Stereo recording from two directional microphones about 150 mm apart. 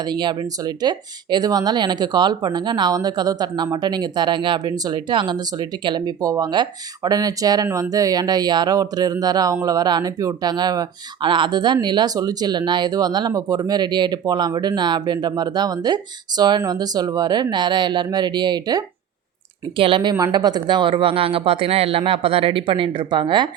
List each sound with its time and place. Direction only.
0.0 s speech: 30° right (ahead or behind)